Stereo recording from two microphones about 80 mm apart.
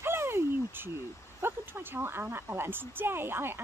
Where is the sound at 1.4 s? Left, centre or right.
Right.